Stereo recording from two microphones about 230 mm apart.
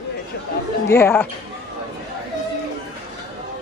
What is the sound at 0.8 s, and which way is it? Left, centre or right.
Speech, centre.